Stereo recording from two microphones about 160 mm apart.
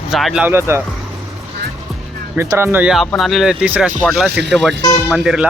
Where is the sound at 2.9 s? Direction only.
Centre (ahead or behind).